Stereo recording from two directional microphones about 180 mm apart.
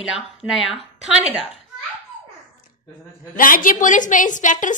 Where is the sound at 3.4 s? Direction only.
50° left (ahead or behind).